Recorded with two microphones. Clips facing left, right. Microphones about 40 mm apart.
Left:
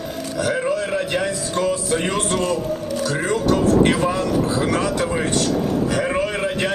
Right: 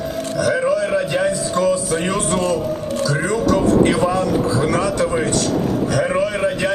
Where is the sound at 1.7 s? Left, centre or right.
Left.